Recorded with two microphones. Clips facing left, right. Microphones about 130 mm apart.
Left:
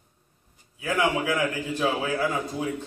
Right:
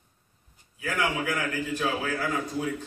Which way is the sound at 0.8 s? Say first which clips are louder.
Left 4 dB; 25° left (ahead or behind).